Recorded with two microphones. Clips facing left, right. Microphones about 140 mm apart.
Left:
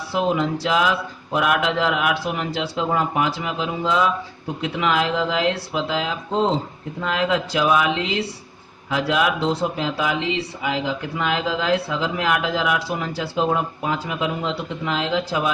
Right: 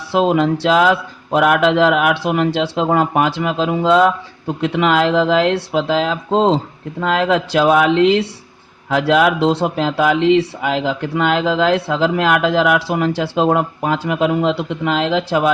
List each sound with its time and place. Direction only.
0.1 s speech: 75° right (ahead or behind)